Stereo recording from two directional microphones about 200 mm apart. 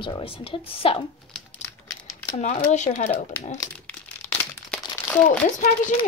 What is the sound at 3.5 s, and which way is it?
Speech, 15° left (ahead or behind).